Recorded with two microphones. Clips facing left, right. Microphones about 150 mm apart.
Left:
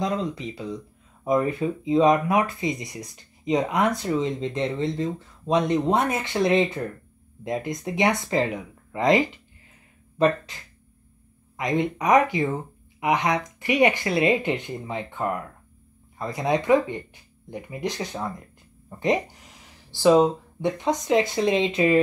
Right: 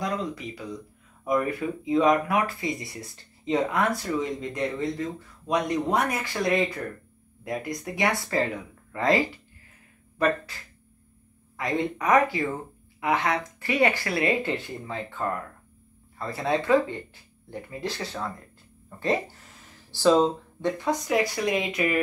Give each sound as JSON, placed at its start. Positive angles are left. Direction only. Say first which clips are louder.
{"t": 0.0, "sound": "speech", "louder": "left 3 dB", "side_deg": 25}
{"t": 18.9, "sound": "a sound", "louder": "left 3 dB", "side_deg": 15}
{"t": 20.0, "sound": "speech", "louder": "left 3 dB", "side_deg": 15}